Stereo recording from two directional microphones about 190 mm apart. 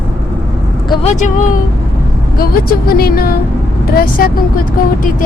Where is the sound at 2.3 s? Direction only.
50° left (ahead or behind).